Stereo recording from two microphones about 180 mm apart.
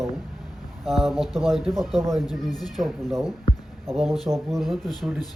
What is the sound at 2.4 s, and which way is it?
Speech, 20° left (ahead or behind).